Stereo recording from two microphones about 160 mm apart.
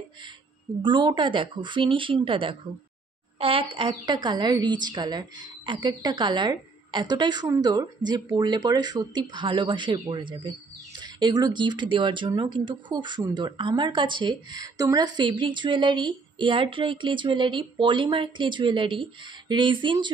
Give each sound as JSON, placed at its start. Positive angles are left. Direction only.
{"t": 0.8, "sound": "speech", "side_deg": -30}